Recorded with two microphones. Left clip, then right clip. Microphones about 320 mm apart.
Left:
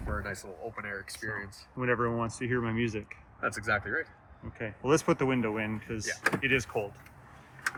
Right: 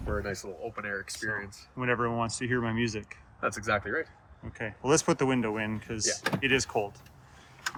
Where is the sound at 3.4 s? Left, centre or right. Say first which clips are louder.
Right 1 dB; right.